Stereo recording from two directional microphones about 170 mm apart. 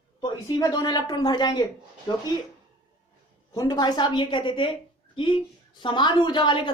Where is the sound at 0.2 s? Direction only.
25° left (ahead or behind).